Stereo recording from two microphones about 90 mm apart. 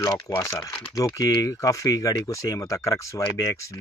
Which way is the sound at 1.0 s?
40° left (ahead or behind).